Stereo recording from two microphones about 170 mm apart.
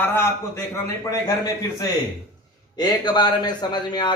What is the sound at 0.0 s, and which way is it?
Speech, 15° left (ahead or behind).